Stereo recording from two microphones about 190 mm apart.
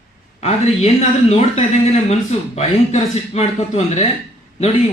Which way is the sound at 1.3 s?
35° left (ahead or behind).